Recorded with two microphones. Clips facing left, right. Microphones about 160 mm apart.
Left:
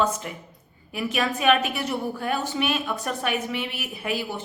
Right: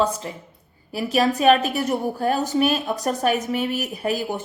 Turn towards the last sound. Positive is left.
turn(degrees=-45)  # may be behind; listen again after turning